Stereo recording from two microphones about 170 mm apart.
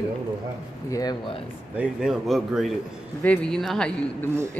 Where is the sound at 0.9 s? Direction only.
20° left (ahead or behind).